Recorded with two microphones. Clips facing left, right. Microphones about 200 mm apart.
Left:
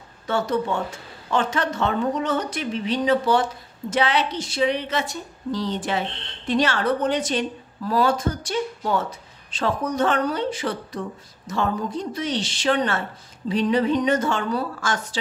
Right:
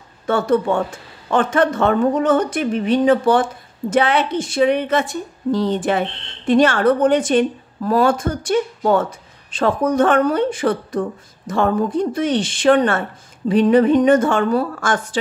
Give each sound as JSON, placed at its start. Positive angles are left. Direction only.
{"t": 0.3, "sound": "a woman's voice", "side_deg": -55}